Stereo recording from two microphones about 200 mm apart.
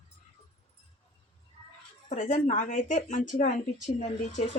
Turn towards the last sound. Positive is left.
turn(degrees=35)  # may be behind; listen again after turning